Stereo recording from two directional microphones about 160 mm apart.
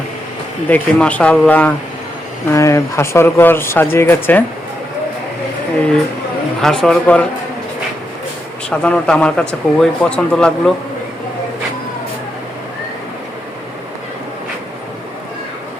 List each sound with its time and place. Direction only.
0.7 s speech: 10° left (ahead or behind)
6.6 s speech: 5° left (ahead or behind)
8.7 s speech: 5° left (ahead or behind)